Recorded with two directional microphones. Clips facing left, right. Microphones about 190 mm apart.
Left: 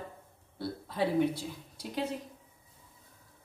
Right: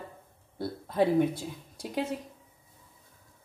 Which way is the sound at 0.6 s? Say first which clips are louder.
Right 5 dB; 50° right (ahead or behind).